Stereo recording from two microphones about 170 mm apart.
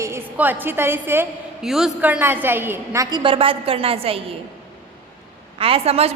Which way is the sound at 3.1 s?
30° right (ahead or behind).